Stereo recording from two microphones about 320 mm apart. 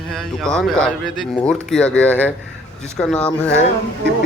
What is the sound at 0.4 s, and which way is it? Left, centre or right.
Speech, centre.